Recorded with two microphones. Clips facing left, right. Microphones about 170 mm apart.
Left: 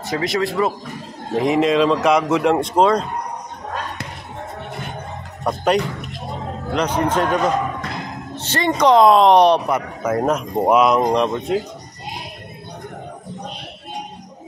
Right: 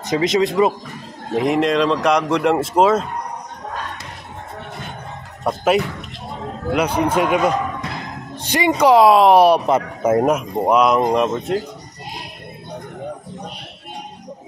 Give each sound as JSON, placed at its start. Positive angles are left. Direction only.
{"t": 0.0, "sound": "speech", "side_deg": -20}
{"t": 1.3, "sound": "speech", "side_deg": 0}
{"t": 5.4, "sound": "speech", "side_deg": -5}
{"t": 9.7, "sound": "speech", "side_deg": -25}
{"t": 10.5, "sound": "speech", "side_deg": 5}